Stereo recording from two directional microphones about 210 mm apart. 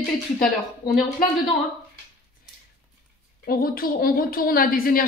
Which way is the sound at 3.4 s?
45° left (ahead or behind).